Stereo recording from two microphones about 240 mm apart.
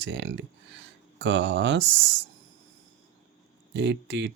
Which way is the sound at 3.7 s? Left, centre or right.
Right.